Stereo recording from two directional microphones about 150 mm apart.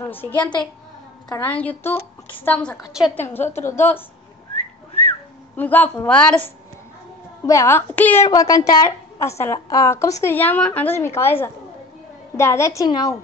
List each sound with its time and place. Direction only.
0.0 s a child's voice: 15° left (ahead or behind)
0.4 s a woman's voice: 30° left (ahead or behind)
1.4 s a woman's voice: 10° left (ahead or behind)
2.8 s a woman's voice: 5° right (ahead or behind)
3.2 s a woman's voice: 15° left (ahead or behind)
5.6 s a woman's voice: 10° left (ahead or behind)
7.4 s a woman's voice: 20° left (ahead or behind)
12.4 s a woman's voice: 20° left (ahead or behind)